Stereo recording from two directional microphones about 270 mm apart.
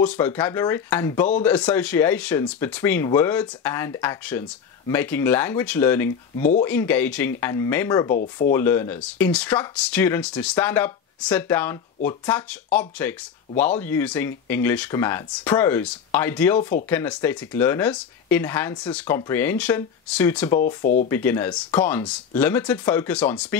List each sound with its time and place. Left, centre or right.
0.0 s speech: centre
8.1 s speech: left
8.5 s speech: centre
20.5 s speech: left
21.1 s speech: centre